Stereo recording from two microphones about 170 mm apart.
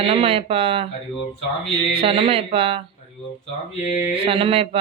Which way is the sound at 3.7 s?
45° left (ahead or behind).